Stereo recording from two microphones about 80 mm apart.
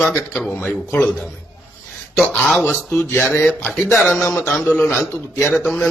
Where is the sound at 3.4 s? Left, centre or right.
Centre.